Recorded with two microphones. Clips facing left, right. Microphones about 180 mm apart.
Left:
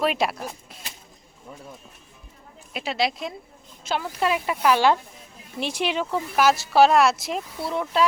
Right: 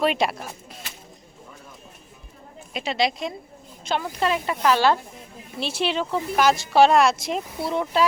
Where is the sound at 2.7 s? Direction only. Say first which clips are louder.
Right 1 dB; 5° left (ahead or behind).